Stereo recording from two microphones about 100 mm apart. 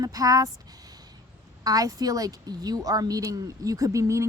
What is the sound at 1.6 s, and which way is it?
A woman's voice, 35° right (ahead or behind).